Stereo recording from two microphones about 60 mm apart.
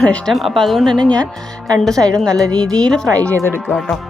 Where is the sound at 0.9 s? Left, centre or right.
Centre.